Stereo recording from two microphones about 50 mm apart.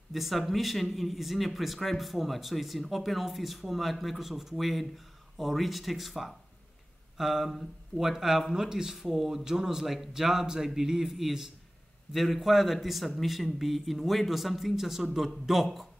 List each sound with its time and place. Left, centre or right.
0.1 s a man's voice: centre